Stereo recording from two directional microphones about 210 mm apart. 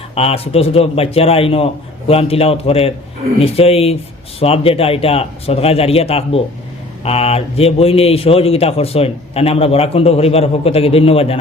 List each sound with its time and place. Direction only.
0.1 s a man's voice: 30° left (ahead or behind)